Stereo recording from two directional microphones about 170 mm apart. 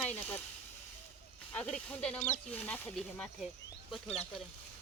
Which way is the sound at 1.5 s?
5° left (ahead or behind).